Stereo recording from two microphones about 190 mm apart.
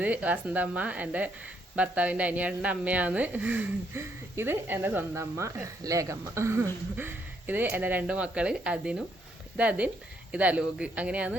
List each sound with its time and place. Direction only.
0.0 s speech: 10° right (ahead or behind)